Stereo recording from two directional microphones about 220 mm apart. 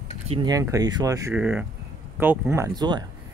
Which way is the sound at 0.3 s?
20° right (ahead or behind).